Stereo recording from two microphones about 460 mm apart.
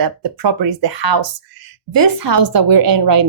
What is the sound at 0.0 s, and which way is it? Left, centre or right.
Speech, right.